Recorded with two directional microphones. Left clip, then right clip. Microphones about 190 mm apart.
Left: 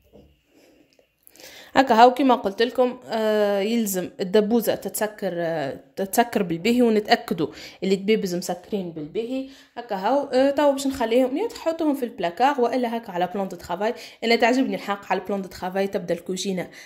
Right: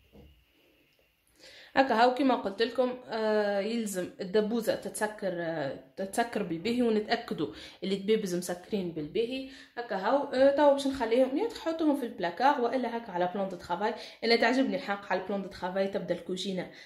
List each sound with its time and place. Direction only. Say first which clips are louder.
1.7 s a woman's voice: left 9 dB; 35° left (ahead or behind)
9.8 s a woman's voice: left 6 dB; 45° left (ahead or behind)